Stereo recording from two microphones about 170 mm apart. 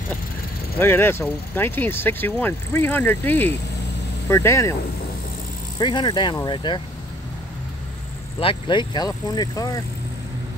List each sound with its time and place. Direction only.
0.7 s speech: 15° left (ahead or behind)
5.8 s speech: 25° left (ahead or behind)
8.4 s speech: 30° left (ahead or behind)